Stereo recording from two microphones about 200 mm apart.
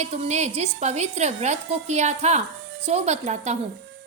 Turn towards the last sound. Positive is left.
turn(degrees=-35)  # may be behind; listen again after turning